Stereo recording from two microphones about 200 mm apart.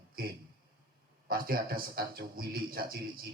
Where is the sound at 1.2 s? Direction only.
45° right (ahead or behind).